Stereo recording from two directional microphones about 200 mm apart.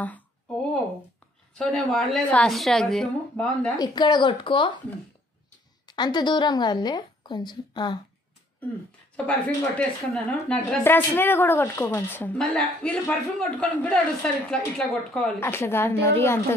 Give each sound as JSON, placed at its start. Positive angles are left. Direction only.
{"t": 0.0, "sound": "a sound", "side_deg": 10}
{"t": 1.6, "sound": "a woman's voice", "side_deg": 0}
{"t": 3.7, "sound": "speech", "side_deg": 20}
{"t": 5.9, "sound": "speech", "side_deg": 20}
{"t": 9.1, "sound": "a woman's voice", "side_deg": 5}